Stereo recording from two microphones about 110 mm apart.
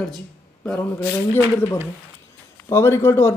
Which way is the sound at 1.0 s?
25° left (ahead or behind).